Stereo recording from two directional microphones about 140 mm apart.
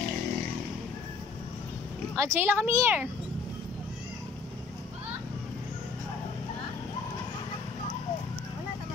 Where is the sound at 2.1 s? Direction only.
15° right (ahead or behind).